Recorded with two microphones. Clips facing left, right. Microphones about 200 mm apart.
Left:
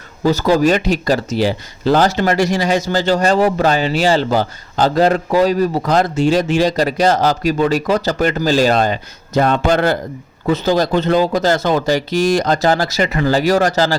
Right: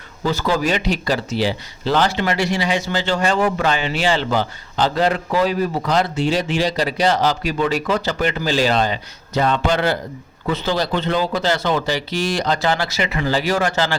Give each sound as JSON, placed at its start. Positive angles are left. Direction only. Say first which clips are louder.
{"t": 0.3, "sound": "speech", "louder": "left 6 dB", "side_deg": 40}